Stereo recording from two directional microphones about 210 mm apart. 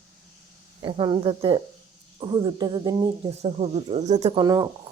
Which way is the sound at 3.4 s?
30° right (ahead or behind).